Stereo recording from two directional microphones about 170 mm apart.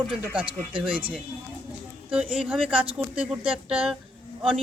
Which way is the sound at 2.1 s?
5° right (ahead or behind).